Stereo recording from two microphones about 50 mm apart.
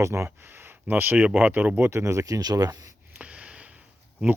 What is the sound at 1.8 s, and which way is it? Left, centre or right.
Speech, right.